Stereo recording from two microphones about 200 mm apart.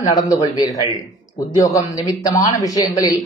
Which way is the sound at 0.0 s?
20° left (ahead or behind).